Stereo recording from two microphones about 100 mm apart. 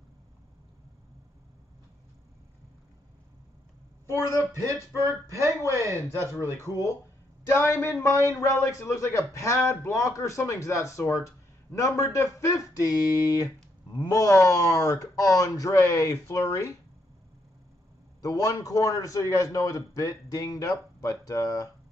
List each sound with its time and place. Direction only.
4.3 s speech: 25° left (ahead or behind)
5.7 s speech: 30° right (ahead or behind)
6.1 s a man's voice: 25° left (ahead or behind)
18.2 s a man's voice: 35° left (ahead or behind)